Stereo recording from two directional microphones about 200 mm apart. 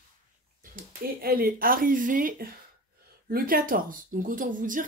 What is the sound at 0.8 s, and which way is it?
Speech, 50° right (ahead or behind).